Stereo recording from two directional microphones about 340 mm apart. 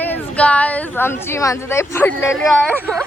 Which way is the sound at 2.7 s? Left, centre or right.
Centre.